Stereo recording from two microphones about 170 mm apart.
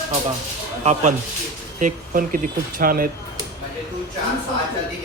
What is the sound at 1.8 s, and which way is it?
A man's voice, 55° right (ahead or behind).